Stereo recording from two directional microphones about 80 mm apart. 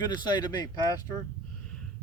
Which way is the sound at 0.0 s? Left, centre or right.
Left.